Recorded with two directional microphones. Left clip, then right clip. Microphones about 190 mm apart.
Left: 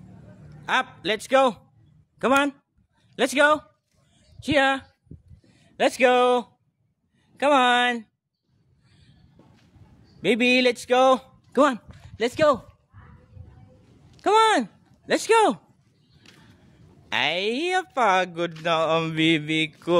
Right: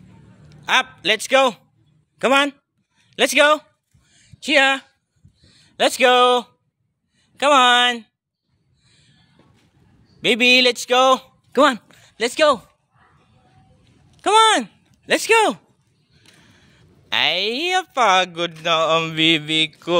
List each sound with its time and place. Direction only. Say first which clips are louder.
0.5 s a man's voice: right 6 dB; centre (ahead or behind)
4.1 s a sound: right 6 dB; 5° left (ahead or behind)
5.6 s a man's voice: right 4 dB; centre (ahead or behind)
10.2 s speech: right 6 dB; 5° left (ahead or behind)
12.2 s a man's voice: right 4 dB; 10° right (ahead or behind)
14.2 s speech: right 4 dB; centre (ahead or behind)
16.3 s neigh: right 1 dB; 60° right (ahead or behind)
17.1 s speech: right 5 dB; 10° left (ahead or behind)
18.6 s mantra: right 5 dB; 5° left (ahead or behind)